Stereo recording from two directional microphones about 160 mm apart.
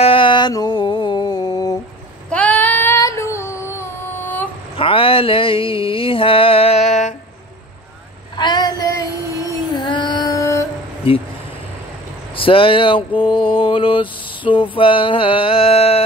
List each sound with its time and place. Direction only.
0.0 s music: 30° left (ahead or behind)
2.2 s female singing: 10° left (ahead or behind)
4.7 s a sound: 35° left (ahead or behind)
8.4 s female singing: 25° left (ahead or behind)
11.1 s speech: 35° left (ahead or behind)
12.4 s mantra: 35° left (ahead or behind)